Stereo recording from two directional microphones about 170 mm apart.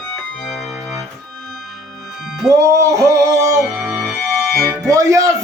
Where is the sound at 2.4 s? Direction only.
20° right (ahead or behind).